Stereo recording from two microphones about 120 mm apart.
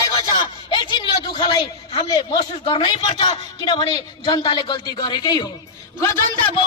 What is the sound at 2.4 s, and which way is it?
A man's voice, 55° left (ahead or behind).